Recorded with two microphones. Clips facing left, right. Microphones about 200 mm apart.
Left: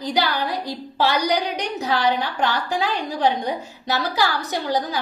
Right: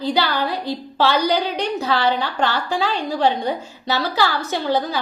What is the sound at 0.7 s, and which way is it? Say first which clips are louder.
A woman's voice: right 3 dB; 15° left (ahead or behind).